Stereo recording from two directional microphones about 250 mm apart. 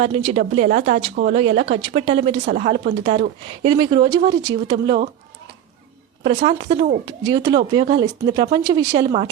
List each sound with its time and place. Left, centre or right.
0.0 s speech: right
6.2 s speech: centre